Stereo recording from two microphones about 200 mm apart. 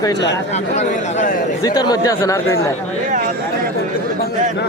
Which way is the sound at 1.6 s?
20° left (ahead or behind).